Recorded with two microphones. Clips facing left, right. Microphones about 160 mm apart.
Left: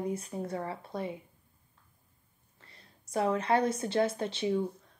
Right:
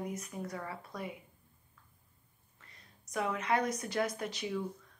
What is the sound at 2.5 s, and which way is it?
A woman's voice, 30° left (ahead or behind).